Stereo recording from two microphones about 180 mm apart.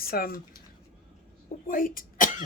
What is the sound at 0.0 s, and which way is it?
Speech, 55° left (ahead or behind).